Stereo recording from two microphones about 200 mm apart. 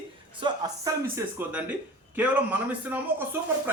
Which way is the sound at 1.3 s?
10° right (ahead or behind).